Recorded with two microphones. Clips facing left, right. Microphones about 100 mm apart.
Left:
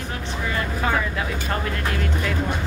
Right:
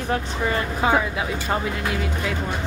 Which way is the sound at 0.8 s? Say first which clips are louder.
Right 3 dB; 15° right (ahead or behind).